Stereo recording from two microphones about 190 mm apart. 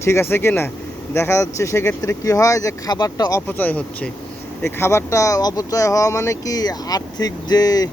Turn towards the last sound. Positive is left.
turn(degrees=20)  # may be behind; listen again after turning